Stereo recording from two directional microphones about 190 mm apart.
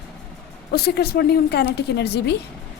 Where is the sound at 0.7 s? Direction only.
60° left (ahead or behind).